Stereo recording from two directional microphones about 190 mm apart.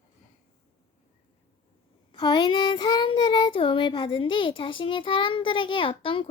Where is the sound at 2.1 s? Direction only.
25° left (ahead or behind).